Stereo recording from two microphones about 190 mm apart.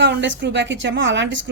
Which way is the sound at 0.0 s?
70° right (ahead or behind).